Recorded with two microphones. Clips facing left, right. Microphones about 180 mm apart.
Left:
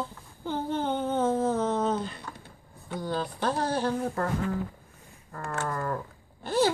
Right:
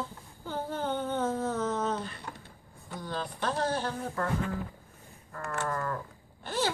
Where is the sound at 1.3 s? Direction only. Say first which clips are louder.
Left 5 dB; 30° left (ahead or behind).